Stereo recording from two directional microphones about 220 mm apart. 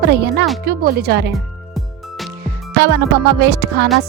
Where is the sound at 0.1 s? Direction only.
45° right (ahead or behind).